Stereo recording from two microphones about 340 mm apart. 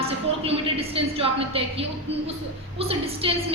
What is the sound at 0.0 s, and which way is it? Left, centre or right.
A woman's voice, centre.